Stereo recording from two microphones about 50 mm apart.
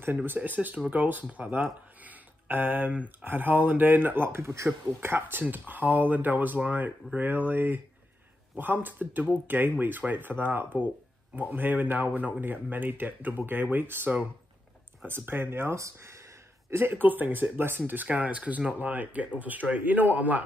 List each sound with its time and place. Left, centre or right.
0.0 s speech: right
3.3 s speech: right
5.0 s speech: right
5.4 s speech: right
15.7 s speech: right
16.7 s speech: right
18.0 s speech: right